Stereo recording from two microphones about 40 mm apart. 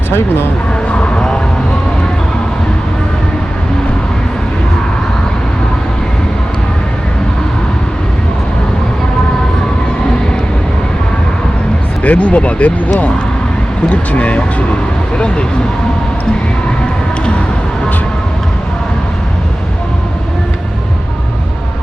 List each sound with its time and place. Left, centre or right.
12.0 s speech: left